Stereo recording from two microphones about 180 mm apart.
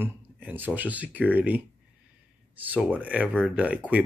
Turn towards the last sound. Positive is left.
turn(degrees=-5)  # may be behind; listen again after turning